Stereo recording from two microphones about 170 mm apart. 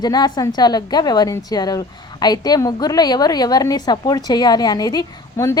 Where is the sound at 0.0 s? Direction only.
25° left (ahead or behind).